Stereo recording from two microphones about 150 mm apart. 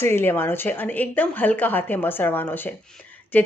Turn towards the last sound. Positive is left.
turn(degrees=10)  # may be behind; listen again after turning